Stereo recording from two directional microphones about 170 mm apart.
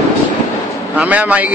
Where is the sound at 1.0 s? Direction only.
10° right (ahead or behind).